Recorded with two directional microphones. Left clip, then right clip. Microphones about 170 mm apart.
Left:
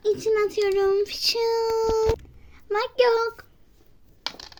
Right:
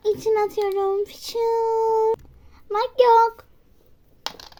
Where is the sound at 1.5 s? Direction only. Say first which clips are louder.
Right 2 dB; 15° left (ahead or behind).